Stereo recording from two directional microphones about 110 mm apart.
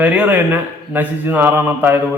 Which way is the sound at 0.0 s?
10° right (ahead or behind).